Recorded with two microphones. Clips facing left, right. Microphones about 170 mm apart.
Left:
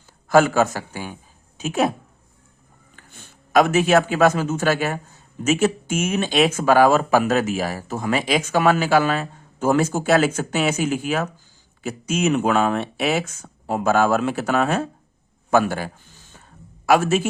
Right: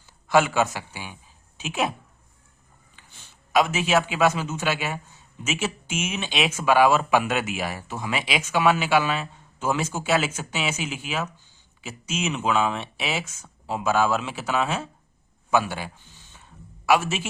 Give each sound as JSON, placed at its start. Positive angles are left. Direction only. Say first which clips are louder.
{"t": 0.3, "sound": "a woman's voice", "louder": "left 5 dB", "side_deg": 45}
{"t": 2.9, "sound": "a man's voice", "louder": "left 7 dB", "side_deg": 50}